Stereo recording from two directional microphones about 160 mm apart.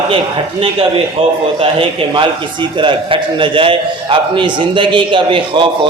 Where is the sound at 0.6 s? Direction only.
35° right (ahead or behind).